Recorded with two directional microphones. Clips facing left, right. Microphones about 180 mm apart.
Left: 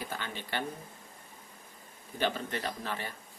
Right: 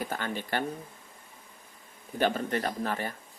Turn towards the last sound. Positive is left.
turn(degrees=-45)  # may be behind; listen again after turning